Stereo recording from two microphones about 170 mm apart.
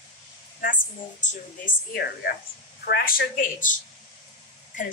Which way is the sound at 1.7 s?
70° left (ahead or behind).